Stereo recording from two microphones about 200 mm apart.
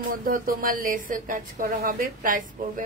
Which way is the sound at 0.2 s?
45° right (ahead or behind).